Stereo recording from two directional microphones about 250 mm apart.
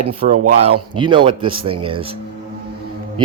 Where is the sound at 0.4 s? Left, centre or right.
Right.